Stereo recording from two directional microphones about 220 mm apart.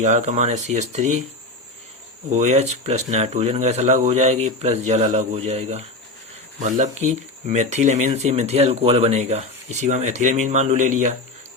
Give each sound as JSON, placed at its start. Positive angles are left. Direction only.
{"t": 0.0, "sound": "speech", "side_deg": -30}
{"t": 2.3, "sound": "speech", "side_deg": -35}